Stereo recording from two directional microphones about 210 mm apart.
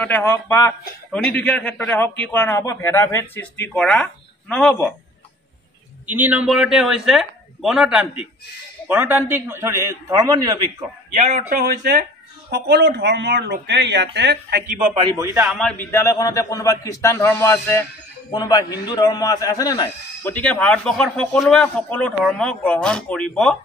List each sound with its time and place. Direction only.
0.0 s speech: 10° left (ahead or behind)
6.0 s a man's voice: 10° right (ahead or behind)
11.1 s speech: 35° right (ahead or behind); by 14.6 s 50° right (ahead or behind)
15.0 s a man's voice: 20° right (ahead or behind)
15.5 s speech: 5° left (ahead or behind)
20.3 s speech: 5° left (ahead or behind)